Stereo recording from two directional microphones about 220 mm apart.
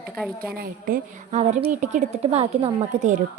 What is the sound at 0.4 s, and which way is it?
A woman's voice, 40° right (ahead or behind).